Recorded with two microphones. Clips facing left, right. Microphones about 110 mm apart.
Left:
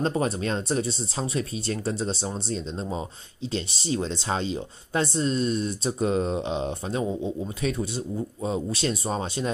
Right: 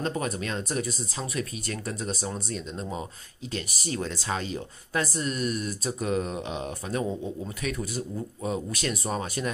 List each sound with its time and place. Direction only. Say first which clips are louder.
0.0 s speech: left 4 dB; 30° left (ahead or behind)